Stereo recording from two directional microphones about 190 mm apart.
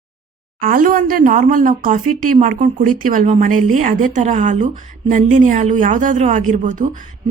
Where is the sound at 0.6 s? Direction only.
45° right (ahead or behind).